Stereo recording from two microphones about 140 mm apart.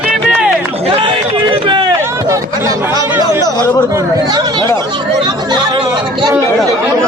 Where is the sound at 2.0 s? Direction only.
20° right (ahead or behind).